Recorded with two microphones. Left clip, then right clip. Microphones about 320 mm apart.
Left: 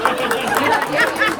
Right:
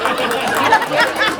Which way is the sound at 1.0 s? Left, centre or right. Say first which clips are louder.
Right 1 dB; centre.